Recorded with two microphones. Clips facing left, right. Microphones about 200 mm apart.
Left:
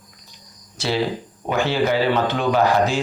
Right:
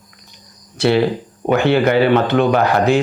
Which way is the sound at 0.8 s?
60° right (ahead or behind).